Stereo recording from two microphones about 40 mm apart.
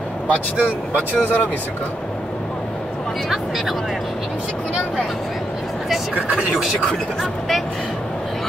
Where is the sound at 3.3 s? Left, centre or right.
Centre.